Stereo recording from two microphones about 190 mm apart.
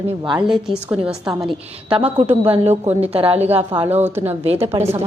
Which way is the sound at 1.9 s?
30° right (ahead or behind).